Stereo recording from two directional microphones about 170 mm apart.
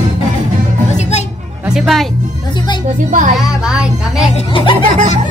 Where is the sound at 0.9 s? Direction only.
40° left (ahead or behind).